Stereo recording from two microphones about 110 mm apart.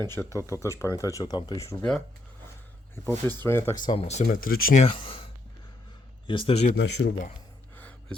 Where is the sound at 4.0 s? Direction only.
90° left.